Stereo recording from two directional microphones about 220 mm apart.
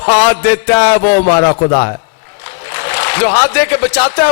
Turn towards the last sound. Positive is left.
turn(degrees=10)  # may be behind; listen again after turning